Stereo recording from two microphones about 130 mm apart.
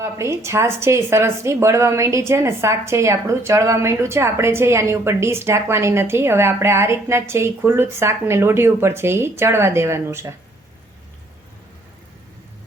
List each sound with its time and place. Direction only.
0.0 s a woman's voice: 20° right (ahead or behind)